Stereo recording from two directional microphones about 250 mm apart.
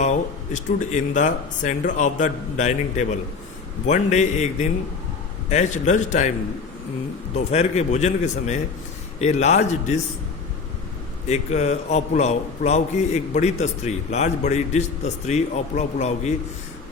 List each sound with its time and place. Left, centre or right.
0.0 s a man's voice: left
7.3 s a man's voice: left
11.3 s a man's voice: left